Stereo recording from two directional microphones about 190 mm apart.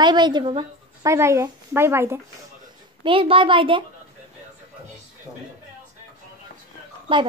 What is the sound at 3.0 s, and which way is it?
Speech, 25° right (ahead or behind).